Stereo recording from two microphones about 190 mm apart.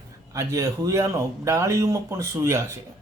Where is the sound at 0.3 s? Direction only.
15° right (ahead or behind).